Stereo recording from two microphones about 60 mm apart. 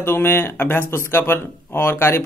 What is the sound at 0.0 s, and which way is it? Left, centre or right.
Speech, left.